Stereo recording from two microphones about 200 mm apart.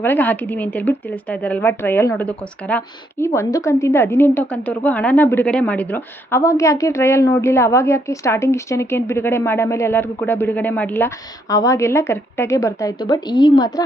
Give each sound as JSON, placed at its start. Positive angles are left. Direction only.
{"t": 0.0, "sound": "speech", "side_deg": 10}